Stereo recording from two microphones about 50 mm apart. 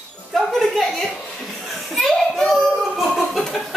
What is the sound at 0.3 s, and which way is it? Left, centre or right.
Music, centre.